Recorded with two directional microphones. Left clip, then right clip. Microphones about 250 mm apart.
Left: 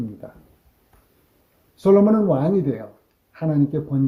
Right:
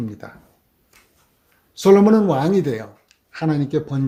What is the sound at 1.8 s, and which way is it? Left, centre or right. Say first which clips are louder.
Speech: right 3 dB; right.